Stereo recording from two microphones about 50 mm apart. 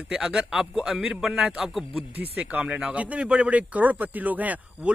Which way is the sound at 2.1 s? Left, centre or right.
Right.